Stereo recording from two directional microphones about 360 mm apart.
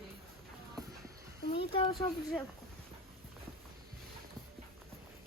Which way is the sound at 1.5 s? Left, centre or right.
Centre.